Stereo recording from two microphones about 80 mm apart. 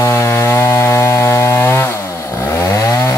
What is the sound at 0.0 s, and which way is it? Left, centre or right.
Chainsaw, left.